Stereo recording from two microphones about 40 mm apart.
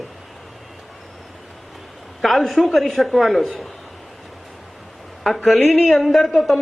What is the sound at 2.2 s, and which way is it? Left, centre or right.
A man's voice, centre.